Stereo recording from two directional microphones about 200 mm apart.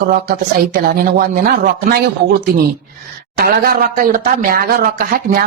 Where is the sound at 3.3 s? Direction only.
50° right (ahead or behind).